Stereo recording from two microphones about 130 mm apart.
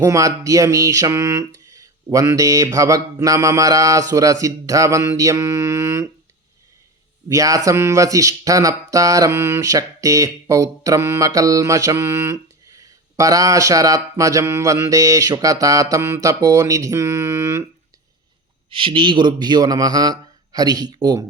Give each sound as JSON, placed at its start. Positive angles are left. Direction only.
{"t": 0.0, "sound": "mantra", "side_deg": -25}
{"t": 7.3, "sound": "mantra", "side_deg": -25}
{"t": 18.7, "sound": "a man's voice", "side_deg": -45}